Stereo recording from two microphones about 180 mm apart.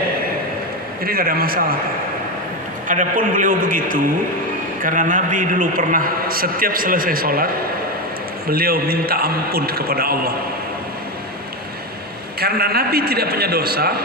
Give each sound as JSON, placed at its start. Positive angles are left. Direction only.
{"t": 1.0, "sound": "a man's voice", "side_deg": -55}
{"t": 2.8, "sound": "a man's voice", "side_deg": -45}
{"t": 8.4, "sound": "a man's voice", "side_deg": -55}
{"t": 12.4, "sound": "a man's voice", "side_deg": -60}